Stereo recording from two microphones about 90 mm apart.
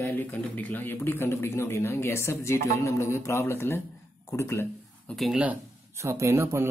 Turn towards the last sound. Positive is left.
turn(degrees=-30)  # may be behind; listen again after turning